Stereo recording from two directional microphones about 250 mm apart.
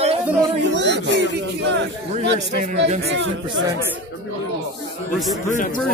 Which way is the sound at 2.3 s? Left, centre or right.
Right.